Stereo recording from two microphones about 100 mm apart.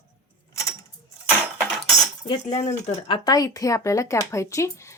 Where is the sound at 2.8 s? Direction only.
75° left (ahead or behind).